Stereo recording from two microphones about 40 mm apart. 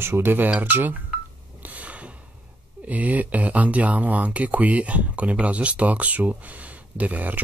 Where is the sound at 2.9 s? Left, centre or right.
Right.